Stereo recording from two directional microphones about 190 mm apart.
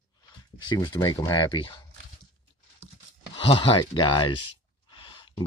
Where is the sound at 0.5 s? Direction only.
25° left (ahead or behind).